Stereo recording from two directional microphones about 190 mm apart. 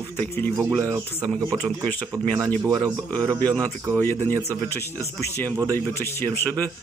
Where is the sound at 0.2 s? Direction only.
5° left (ahead or behind).